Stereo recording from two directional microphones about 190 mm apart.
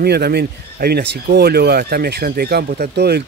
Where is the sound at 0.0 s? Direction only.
55° right (ahead or behind).